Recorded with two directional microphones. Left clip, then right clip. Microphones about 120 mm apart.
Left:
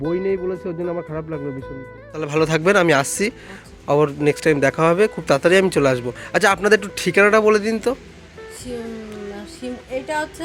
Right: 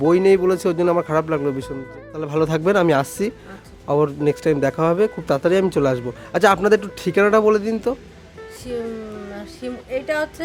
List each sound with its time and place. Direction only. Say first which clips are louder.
0.1 s speech: right 7 dB; 35° right (ahead or behind)
2.1 s speech: left 1 dB; 15° right (ahead or behind)
9.3 s music: right 1 dB; 10° right (ahead or behind)